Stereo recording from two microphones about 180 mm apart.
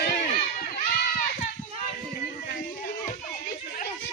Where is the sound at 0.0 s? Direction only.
55° left (ahead or behind).